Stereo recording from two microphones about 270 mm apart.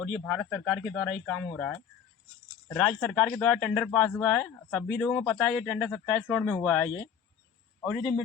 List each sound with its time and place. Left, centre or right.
0.0 s a man's voice: centre